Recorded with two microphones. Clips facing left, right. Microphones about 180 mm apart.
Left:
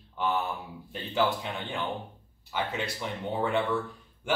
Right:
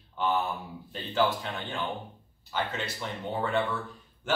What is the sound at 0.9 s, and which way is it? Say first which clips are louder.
Speech: even; 15° left (ahead or behind).